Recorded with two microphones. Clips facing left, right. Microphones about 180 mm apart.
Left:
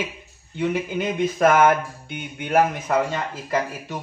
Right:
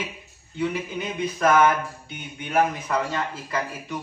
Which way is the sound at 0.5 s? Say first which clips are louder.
Left 3 dB; 55° left (ahead or behind).